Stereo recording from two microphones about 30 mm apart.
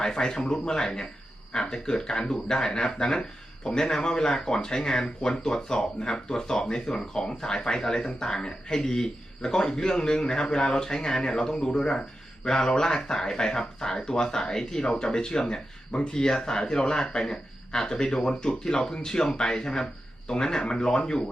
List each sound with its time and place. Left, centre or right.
0.0 s speech: left